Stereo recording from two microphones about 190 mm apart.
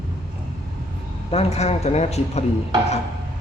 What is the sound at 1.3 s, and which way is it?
Speech, 35° left (ahead or behind).